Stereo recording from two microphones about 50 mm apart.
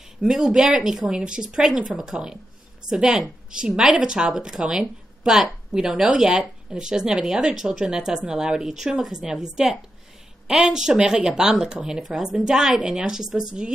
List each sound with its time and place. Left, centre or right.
0.2 s speech: centre